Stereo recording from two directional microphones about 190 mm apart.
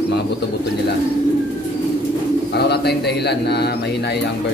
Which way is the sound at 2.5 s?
60° left (ahead or behind).